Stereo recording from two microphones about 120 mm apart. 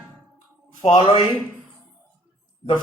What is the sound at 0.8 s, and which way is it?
Speech, 40° left (ahead or behind).